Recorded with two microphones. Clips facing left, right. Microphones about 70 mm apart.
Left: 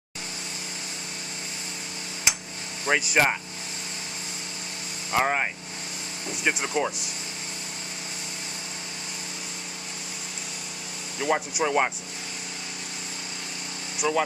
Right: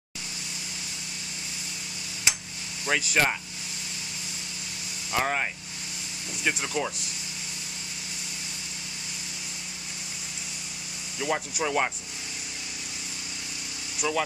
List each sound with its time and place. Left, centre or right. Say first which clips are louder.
2.9 s speech: left 3 dB; centre
5.1 s speech: left 3 dB; centre
11.1 s speech: left 3 dB; centre
14.0 s speech: left 3 dB; centre